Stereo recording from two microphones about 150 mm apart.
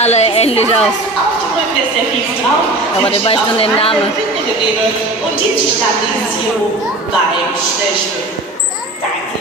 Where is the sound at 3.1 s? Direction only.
40° left (ahead or behind).